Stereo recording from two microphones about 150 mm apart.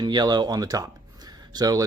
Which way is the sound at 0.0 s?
30° right (ahead or behind).